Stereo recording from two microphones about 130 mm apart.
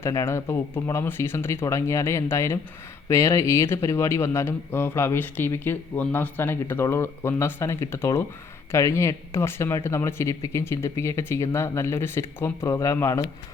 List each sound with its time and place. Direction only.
0.0 s speech: 25° left (ahead or behind)